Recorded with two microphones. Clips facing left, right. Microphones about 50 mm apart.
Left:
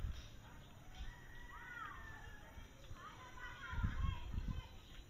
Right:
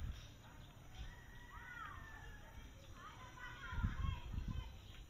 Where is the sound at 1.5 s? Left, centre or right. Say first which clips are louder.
Left 1 dB; centre.